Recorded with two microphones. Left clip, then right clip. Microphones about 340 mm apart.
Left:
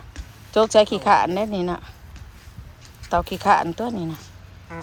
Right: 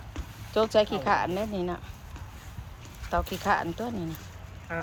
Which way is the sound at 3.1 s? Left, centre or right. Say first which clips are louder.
Left 9 dB; left.